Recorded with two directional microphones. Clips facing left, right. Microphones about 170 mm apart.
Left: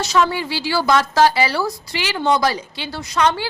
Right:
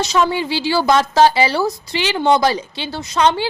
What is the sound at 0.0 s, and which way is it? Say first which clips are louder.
A woman's voice: right 1 dB; 20° right (ahead or behind).